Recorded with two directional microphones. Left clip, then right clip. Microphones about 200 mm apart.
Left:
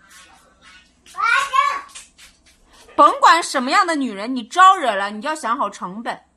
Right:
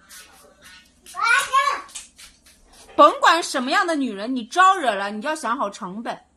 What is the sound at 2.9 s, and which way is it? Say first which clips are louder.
A woman's voice: left 2 dB; 15° left (ahead or behind).